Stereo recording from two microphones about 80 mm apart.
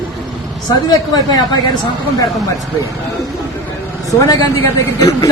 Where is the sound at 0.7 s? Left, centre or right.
Left.